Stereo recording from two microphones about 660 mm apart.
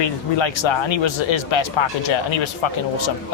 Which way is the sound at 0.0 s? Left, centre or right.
Left.